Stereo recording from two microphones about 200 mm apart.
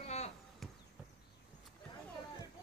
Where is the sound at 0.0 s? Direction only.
30° left (ahead or behind).